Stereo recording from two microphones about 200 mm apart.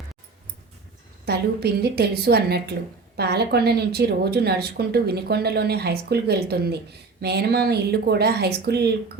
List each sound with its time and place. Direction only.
1.2 s a woman's voice: 55° right (ahead or behind)